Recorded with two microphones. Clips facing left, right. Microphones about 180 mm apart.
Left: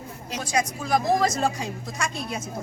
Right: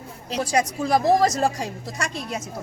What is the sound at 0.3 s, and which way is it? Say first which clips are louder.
A woman's voice: right 4 dB; 35° right (ahead or behind).